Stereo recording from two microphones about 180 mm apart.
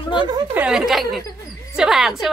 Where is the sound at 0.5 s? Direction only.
5° right (ahead or behind).